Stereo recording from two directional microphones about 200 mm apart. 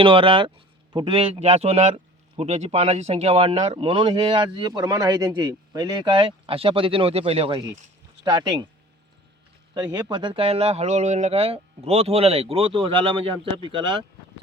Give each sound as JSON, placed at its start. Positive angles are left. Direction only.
{"t": 0.0, "sound": "speech", "side_deg": -25}
{"t": 9.7, "sound": "speech", "side_deg": -20}